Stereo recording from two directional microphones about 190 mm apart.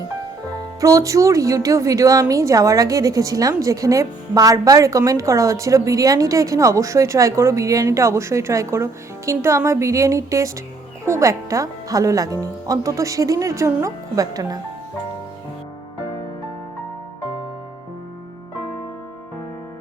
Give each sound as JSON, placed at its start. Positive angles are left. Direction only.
{"t": 0.8, "sound": "a woman's voice", "side_deg": -15}